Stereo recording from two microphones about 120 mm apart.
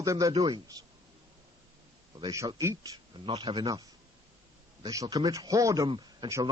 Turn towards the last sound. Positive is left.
turn(degrees=-40)  # may be behind; listen again after turning